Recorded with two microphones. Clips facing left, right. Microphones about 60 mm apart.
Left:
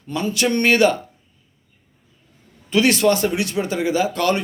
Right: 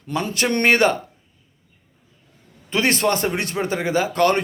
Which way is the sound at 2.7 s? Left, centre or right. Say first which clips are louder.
Left 3 dB; right.